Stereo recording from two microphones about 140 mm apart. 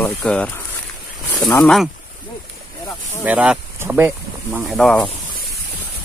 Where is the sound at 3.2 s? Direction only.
10° right (ahead or behind).